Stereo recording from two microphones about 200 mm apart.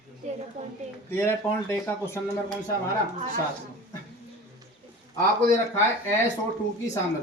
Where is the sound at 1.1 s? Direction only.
10° left (ahead or behind).